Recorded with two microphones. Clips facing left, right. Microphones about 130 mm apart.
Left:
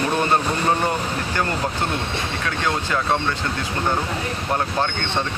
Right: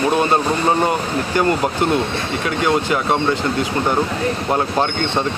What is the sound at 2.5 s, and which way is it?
A man's voice, 15° right (ahead or behind).